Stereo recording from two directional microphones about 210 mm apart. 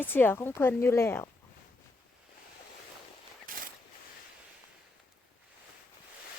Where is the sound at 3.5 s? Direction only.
40° right (ahead or behind).